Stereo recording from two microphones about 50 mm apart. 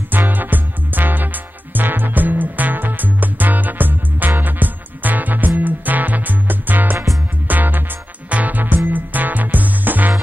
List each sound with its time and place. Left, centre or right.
0.1 s music: right